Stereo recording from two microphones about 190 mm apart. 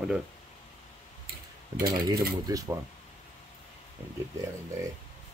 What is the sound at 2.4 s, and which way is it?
Speech, 20° right (ahead or behind).